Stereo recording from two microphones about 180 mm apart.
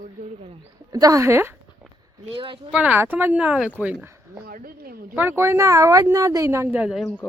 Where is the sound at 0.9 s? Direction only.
20° right (ahead or behind).